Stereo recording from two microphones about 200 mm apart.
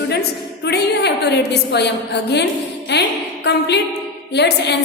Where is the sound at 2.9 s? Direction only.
60° left (ahead or behind).